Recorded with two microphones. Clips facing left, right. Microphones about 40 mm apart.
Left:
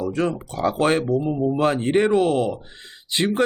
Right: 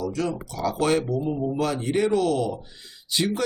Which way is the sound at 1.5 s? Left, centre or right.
Left.